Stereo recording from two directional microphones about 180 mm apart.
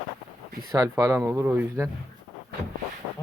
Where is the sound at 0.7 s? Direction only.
20° right (ahead or behind).